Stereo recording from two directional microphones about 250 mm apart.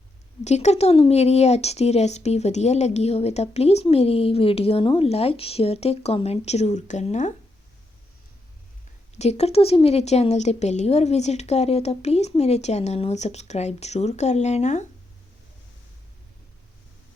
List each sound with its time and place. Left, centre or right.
0.4 s speech: left
9.1 s speech: left